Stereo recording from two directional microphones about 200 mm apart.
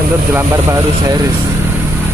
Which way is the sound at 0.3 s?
10° right (ahead or behind).